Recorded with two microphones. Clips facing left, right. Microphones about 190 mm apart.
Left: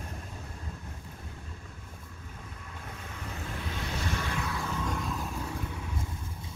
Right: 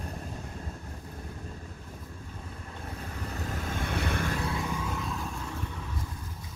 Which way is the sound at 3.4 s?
45° right (ahead or behind).